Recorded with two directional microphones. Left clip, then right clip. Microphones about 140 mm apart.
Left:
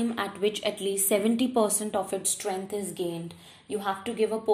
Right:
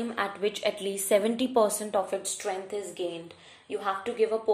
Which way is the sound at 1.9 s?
30° left (ahead or behind).